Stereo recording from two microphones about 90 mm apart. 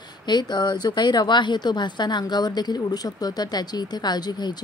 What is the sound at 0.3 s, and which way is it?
A woman's voice, 55° left (ahead or behind).